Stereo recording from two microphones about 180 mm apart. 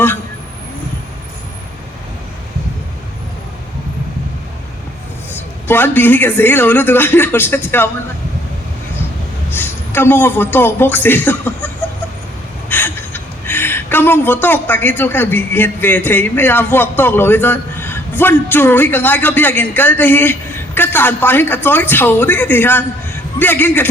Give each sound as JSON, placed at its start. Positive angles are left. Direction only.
{"t": 5.3, "sound": "speech", "side_deg": 10}
{"t": 9.6, "sound": "a woman's voice", "side_deg": 10}
{"t": 12.6, "sound": "a sound", "side_deg": 10}
{"t": 14.4, "sound": "speech", "side_deg": 10}